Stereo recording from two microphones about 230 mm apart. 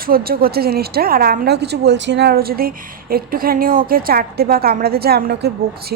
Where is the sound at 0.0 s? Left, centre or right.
Right.